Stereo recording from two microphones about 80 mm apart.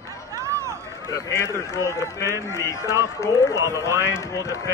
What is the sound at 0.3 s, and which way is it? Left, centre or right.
Run, right.